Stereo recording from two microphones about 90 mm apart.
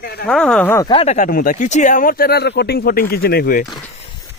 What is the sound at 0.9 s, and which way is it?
Speech, 55° left (ahead or behind).